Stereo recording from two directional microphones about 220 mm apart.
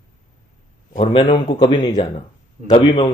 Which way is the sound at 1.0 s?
20° left (ahead or behind).